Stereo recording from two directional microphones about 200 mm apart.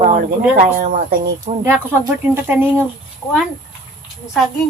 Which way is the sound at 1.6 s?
10° right (ahead or behind).